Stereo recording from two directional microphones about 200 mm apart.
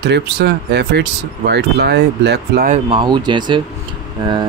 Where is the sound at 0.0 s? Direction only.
55° right (ahead or behind).